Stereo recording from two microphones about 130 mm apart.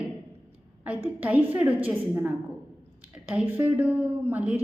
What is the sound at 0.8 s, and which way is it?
A woman's voice, 10° right (ahead or behind).